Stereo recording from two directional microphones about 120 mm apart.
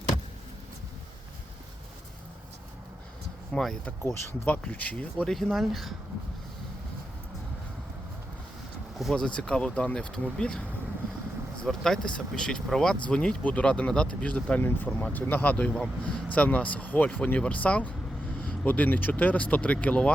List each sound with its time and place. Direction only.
3.5 s speech: 5° left (ahead or behind)
3.8 s speech: 20° left (ahead or behind); by 5.9 s centre (ahead or behind)
9.0 s speech: 5° left (ahead or behind)